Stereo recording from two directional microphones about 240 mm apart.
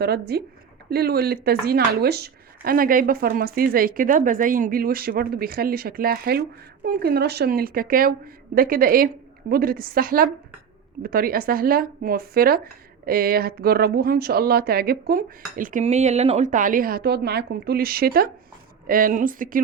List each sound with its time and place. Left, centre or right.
0.0 s speech: right